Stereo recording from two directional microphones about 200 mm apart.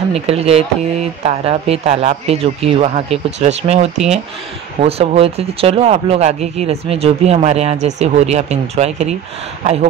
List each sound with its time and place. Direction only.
0.1 s speech: 30° right (ahead or behind)